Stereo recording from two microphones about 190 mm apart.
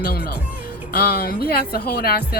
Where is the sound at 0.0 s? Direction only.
50° left (ahead or behind).